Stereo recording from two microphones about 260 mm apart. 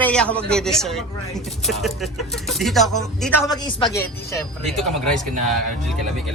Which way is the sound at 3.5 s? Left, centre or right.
Centre.